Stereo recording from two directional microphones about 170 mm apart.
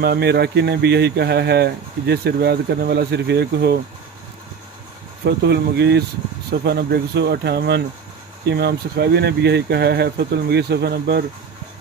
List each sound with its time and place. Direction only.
0.0 s speech: 70° right (ahead or behind)
5.2 s speech: 75° right (ahead or behind)